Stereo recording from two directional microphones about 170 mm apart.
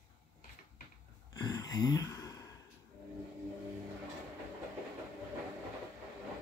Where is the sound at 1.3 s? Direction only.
25° left (ahead or behind).